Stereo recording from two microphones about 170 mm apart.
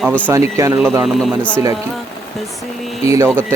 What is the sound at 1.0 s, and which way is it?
Speech, 5° left (ahead or behind).